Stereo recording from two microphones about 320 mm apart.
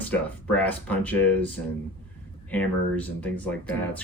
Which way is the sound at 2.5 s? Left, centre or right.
Centre.